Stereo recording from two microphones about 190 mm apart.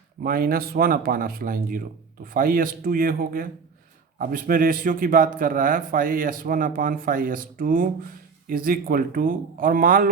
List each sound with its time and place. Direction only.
0.2 s a man's voice: 50° right (ahead or behind)